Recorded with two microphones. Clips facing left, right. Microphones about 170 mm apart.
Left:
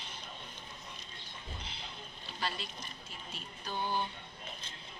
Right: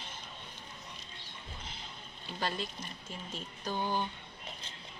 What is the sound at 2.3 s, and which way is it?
Speech, 45° right (ahead or behind).